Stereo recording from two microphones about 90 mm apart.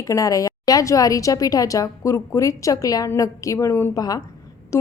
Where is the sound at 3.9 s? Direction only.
45° left (ahead or behind).